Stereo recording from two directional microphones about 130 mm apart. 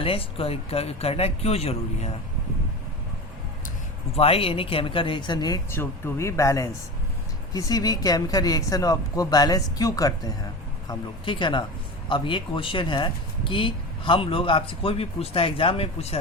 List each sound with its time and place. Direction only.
0.0 s speech: 45° left (ahead or behind)
4.1 s speech: 50° left (ahead or behind); by 5.5 s 35° left (ahead or behind)
5.7 s speech: 20° left (ahead or behind)
10.8 s speech: 35° left (ahead or behind)